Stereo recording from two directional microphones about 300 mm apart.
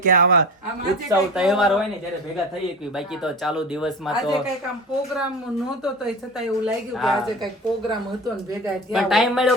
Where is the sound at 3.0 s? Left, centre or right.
Centre.